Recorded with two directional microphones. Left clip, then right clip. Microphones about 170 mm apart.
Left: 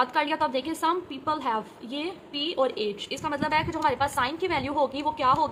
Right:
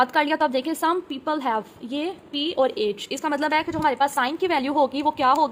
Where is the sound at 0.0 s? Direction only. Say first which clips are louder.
Right 5 dB; 45° right (ahead or behind).